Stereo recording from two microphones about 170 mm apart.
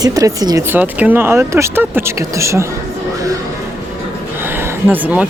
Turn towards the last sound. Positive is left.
turn(degrees=-10)  # may be behind; listen again after turning